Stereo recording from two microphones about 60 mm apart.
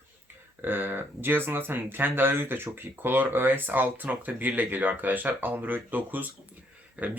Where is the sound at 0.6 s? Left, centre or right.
Right.